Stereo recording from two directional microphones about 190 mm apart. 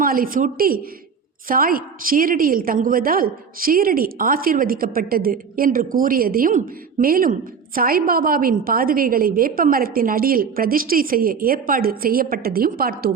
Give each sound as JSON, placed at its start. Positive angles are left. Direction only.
{"t": 0.0, "sound": "a woman's voice", "side_deg": -50}